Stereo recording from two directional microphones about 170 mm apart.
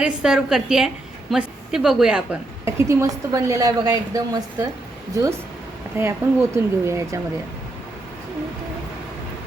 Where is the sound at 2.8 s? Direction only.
20° right (ahead or behind).